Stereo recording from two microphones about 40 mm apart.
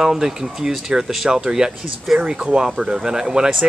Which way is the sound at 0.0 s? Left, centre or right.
Centre.